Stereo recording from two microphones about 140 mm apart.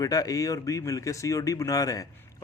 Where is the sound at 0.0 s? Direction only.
25° left (ahead or behind).